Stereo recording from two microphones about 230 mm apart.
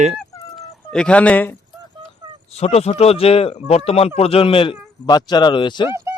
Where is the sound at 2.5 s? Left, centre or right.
Left.